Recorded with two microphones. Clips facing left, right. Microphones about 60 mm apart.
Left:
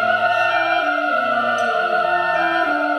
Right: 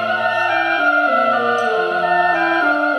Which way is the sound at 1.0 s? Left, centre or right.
Right.